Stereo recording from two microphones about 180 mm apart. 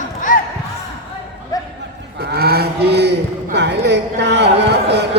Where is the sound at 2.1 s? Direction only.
60° right (ahead or behind).